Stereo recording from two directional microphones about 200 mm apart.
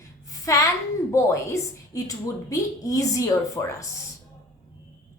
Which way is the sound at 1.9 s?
15° left (ahead or behind).